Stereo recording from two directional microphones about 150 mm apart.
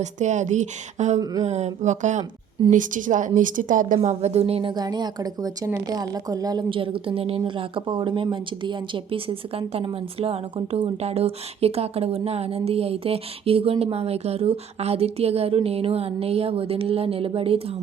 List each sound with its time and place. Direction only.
0.0 s a woman's voice: 50° right (ahead or behind)
1.2 s speech: 25° right (ahead or behind)
1.5 s a woman's voice: 50° right (ahead or behind)
4.1 s a woman's voice: 45° right (ahead or behind)
4.7 s a woman's voice: 25° right (ahead or behind)